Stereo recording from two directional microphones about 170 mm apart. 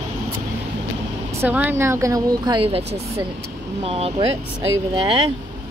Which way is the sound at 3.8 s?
35° right (ahead or behind).